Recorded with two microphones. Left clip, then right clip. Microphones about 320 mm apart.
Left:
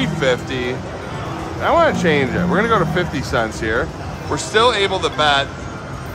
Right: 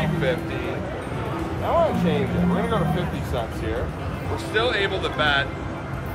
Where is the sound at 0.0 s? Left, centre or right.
Left.